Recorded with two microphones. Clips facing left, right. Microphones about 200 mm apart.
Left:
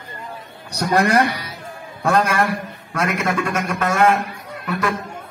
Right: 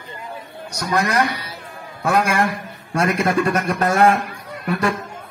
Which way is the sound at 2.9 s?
30° right (ahead or behind).